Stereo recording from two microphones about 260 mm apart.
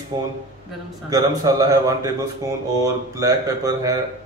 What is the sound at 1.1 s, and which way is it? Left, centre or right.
Speech, centre.